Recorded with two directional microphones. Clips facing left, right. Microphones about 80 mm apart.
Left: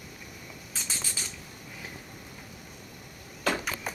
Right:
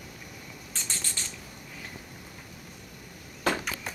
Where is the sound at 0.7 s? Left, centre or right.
Centre.